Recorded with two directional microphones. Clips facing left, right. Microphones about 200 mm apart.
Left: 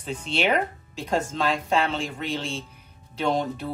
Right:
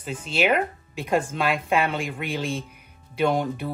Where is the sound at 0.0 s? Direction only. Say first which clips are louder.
Right 1 dB; 5° right (ahead or behind).